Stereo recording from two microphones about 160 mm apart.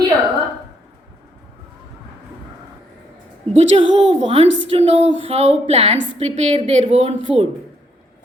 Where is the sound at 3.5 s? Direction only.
40° right (ahead or behind).